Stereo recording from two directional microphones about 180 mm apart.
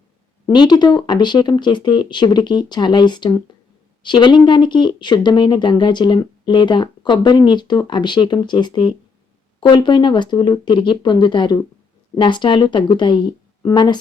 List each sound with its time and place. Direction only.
0.4 s speech: 25° left (ahead or behind)